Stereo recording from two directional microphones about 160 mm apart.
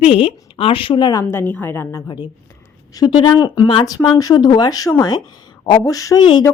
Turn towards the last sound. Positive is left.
turn(degrees=25)  # may be behind; listen again after turning